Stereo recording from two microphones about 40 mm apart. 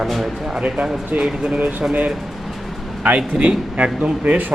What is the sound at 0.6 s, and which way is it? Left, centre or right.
Speech, right.